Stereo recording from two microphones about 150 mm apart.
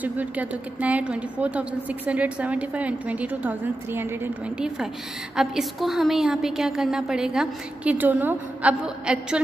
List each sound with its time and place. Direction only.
0.0 s a woman's voice: 10° right (ahead or behind)